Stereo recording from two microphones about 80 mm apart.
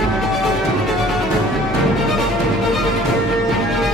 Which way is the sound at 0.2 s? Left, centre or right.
Centre.